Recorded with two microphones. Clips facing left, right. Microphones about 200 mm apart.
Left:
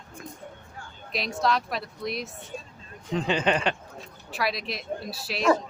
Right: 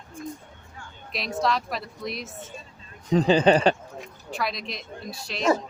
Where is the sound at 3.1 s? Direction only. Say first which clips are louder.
Right 7 dB; 35° right (ahead or behind).